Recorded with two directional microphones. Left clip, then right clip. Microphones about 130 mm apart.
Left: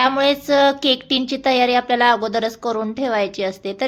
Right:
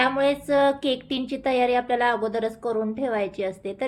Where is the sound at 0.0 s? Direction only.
30° left (ahead or behind).